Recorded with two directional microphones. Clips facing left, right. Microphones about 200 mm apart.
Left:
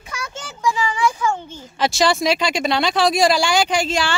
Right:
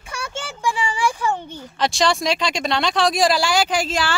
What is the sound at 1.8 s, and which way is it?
Speech, 5° left (ahead or behind).